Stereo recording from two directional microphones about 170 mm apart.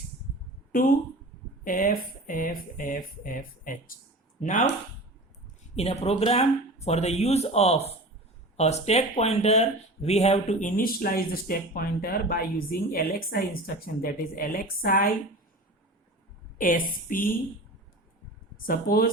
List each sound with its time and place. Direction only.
1.6 s speech: 55° left (ahead or behind)
5.7 s speech: 40° left (ahead or behind); by 15.1 s 55° left (ahead or behind)
16.6 s speech: 55° left (ahead or behind)
18.5 s speech: 55° left (ahead or behind)